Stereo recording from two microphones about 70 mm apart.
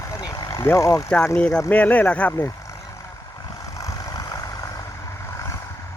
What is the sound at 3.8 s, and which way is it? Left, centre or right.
Vehicle, left.